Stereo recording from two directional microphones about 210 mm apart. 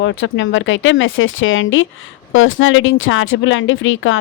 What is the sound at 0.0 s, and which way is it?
A woman's voice, 60° left (ahead or behind).